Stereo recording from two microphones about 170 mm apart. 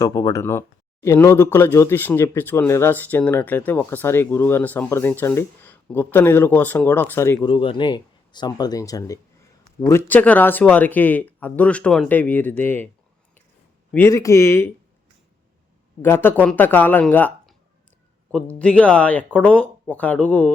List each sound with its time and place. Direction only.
0.0 s speech: 20° left (ahead or behind)
7.4 s speech: 30° left (ahead or behind); by 12.9 s 10° left (ahead or behind)
13.9 s speech: 15° left (ahead or behind)
16.0 s speech: 15° left (ahead or behind)